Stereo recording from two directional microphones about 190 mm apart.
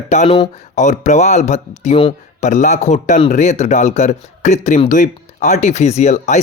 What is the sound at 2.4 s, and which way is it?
Speech, 40° left (ahead or behind).